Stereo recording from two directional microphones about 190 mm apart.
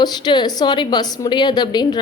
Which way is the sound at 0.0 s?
20° left (ahead or behind).